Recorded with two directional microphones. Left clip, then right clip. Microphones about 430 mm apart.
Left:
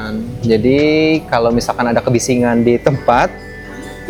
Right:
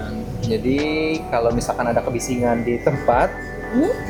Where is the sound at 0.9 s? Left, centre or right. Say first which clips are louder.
Left 9 dB; left.